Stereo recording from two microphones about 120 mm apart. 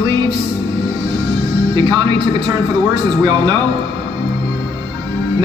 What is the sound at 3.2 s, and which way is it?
Speech, 40° right (ahead or behind).